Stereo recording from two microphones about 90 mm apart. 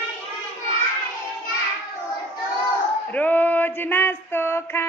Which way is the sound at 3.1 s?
20° left (ahead or behind).